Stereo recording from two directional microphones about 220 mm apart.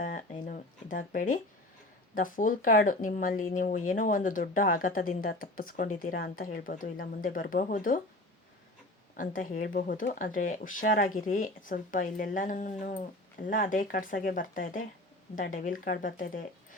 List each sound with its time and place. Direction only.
0.0 s a sound: 35° left (ahead or behind)
2.1 s speech: 40° left (ahead or behind)
9.1 s speech: 40° left (ahead or behind)